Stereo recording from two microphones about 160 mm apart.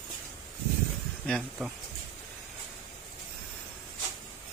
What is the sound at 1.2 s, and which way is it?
Speech, 5° left (ahead or behind).